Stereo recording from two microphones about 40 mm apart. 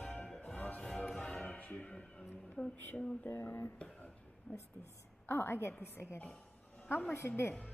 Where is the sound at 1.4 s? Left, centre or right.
Left.